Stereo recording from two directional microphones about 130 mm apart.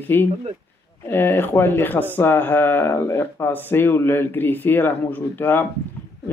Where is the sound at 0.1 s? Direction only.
15° left (ahead or behind).